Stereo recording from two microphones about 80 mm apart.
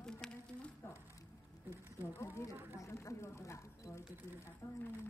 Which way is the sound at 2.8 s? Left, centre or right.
Left.